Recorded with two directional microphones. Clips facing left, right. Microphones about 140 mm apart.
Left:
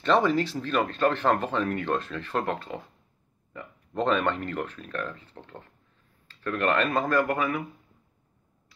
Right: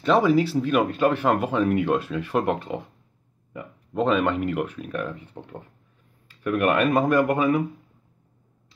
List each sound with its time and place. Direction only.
0.0 s speech: 5° right (ahead or behind)
3.5 s speech: 5° right (ahead or behind); by 7.6 s 20° right (ahead or behind)